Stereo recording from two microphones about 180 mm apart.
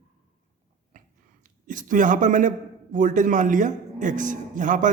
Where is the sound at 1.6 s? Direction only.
45° right (ahead or behind).